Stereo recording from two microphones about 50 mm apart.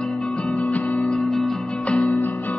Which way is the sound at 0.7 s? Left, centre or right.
Left.